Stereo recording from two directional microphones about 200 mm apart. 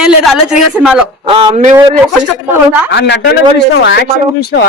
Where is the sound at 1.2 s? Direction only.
25° right (ahead or behind).